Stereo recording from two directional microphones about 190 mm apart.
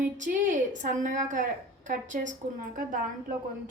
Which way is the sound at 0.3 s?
40° right (ahead or behind).